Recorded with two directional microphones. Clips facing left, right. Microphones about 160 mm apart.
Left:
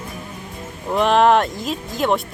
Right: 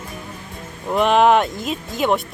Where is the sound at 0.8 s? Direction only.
Centre (ahead or behind).